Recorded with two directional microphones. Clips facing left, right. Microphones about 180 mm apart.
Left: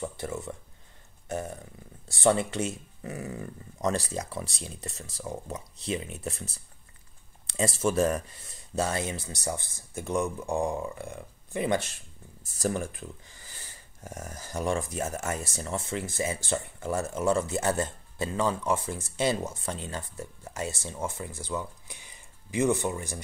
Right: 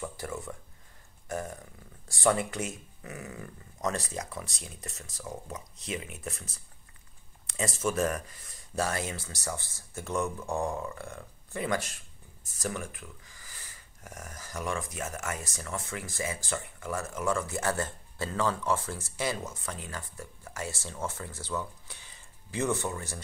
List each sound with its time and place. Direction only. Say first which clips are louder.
0.0 s speech: left 3 dB; 25° left (ahead or behind)
2.0 s speech: left 3 dB; 25° left (ahead or behind)
12.5 s speech: left 6 dB; 30° left (ahead or behind); by 23.2 s 15° left (ahead or behind)